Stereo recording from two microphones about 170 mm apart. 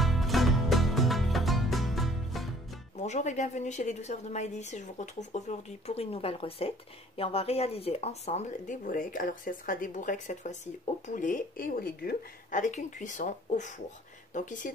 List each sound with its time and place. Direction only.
0.0 s music: centre (ahead or behind)
3.0 s speech: 40° left (ahead or behind)